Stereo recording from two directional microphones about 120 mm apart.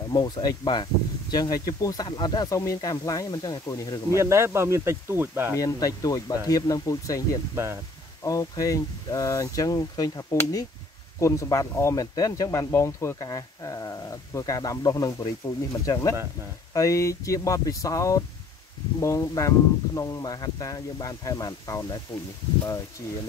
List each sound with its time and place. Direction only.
0.1 s speech: 35° left (ahead or behind)
4.2 s speech: 20° right (ahead or behind)
5.6 s speech: 30° left (ahead or behind)
7.5 s speech: 20° right (ahead or behind)
8.2 s speech: 30° left (ahead or behind)